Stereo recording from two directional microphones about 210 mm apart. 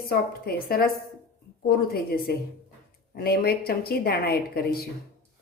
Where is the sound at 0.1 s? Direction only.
45° left (ahead or behind).